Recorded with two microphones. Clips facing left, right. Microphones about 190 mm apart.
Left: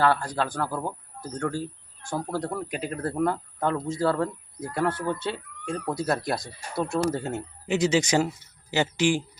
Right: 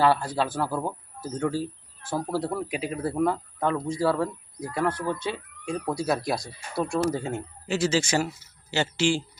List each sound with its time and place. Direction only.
0.0 s speech: 10° right (ahead or behind)
7.7 s speech: 15° left (ahead or behind)